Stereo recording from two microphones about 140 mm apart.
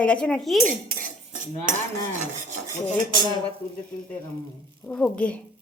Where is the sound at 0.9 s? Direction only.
75° right (ahead or behind).